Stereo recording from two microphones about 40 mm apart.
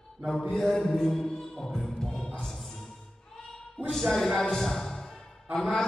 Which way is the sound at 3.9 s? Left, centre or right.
Centre.